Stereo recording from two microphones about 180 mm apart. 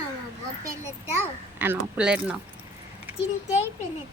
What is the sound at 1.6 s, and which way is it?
Speech, 10° right (ahead or behind).